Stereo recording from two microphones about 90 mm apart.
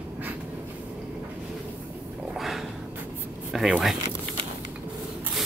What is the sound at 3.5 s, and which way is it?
Speech, 5° right (ahead or behind).